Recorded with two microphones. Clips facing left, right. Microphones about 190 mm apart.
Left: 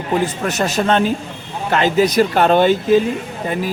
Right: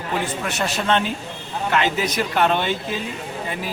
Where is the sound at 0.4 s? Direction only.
40° left (ahead or behind).